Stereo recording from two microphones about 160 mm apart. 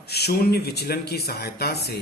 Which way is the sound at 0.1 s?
90° left.